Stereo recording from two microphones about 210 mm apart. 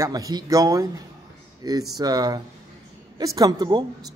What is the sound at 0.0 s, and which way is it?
Speech, 20° right (ahead or behind).